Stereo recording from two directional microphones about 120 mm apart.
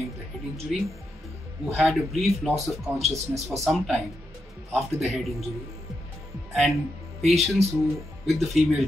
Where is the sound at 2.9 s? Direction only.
65° right (ahead or behind).